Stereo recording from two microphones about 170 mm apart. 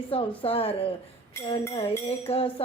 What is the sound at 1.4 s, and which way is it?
Music, 15° left (ahead or behind).